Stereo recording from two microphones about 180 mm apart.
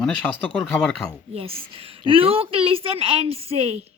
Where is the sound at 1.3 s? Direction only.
30° right (ahead or behind).